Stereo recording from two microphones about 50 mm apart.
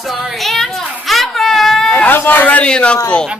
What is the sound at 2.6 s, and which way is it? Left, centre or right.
Speech, left.